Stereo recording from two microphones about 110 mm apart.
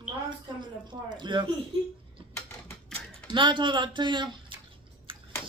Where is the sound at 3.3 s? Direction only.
50° right (ahead or behind).